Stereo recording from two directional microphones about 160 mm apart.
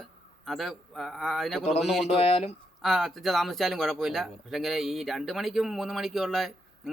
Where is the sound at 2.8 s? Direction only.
Centre (ahead or behind).